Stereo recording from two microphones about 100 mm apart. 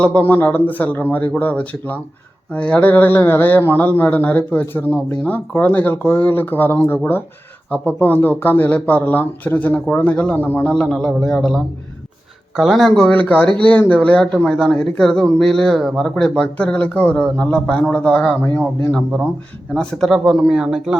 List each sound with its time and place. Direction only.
0.0 s speech: 15° left (ahead or behind)
13.1 s speech: 15° left (ahead or behind)
19.7 s speech: 5° left (ahead or behind)